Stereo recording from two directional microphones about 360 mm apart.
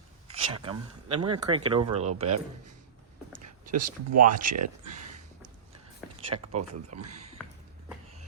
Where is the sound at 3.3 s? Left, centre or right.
Right.